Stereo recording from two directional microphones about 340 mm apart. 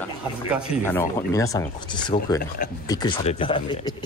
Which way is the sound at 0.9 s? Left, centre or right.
Centre.